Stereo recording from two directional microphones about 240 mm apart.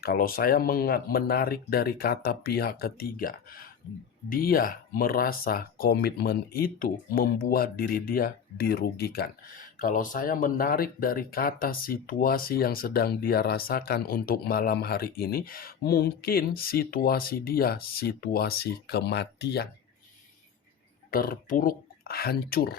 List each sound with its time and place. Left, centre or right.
0.0 s speech: left
21.1 s speech: left